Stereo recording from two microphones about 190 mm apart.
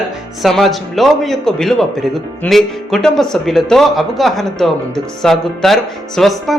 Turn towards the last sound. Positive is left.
turn(degrees=0)  # may be behind; listen again after turning